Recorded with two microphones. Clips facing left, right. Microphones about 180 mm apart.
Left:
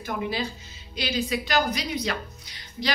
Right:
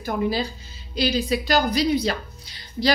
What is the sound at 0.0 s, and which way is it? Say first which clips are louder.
A woman's voice: right 5 dB; 35° right (ahead or behind).